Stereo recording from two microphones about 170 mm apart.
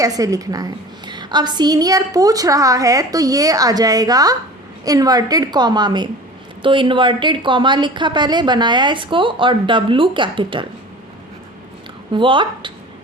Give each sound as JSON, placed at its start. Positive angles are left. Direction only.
{"t": 0.0, "sound": "a woman's voice", "side_deg": -20}
{"t": 12.1, "sound": "a woman's voice", "side_deg": -30}